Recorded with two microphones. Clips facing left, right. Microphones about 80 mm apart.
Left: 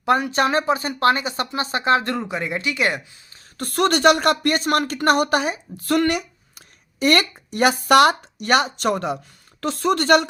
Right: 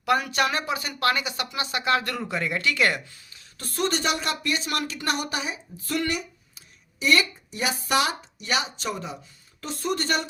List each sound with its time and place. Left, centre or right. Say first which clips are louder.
0.0 s speech: left 4 dB; left
3.6 s speech: left 9 dB; left
9.6 s speech: left 8 dB; left